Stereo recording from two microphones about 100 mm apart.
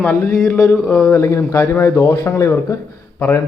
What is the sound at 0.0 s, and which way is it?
Speech, 20° left (ahead or behind).